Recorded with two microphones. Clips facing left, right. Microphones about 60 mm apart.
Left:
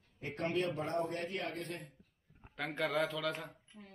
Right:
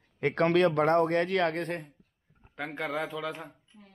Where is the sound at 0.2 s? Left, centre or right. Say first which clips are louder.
Right 12 dB; right.